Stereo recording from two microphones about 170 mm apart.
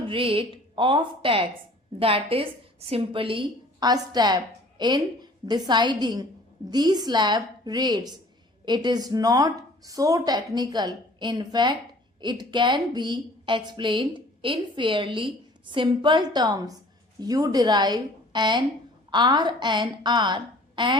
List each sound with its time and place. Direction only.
0.0 s a woman's voice: 30° right (ahead or behind)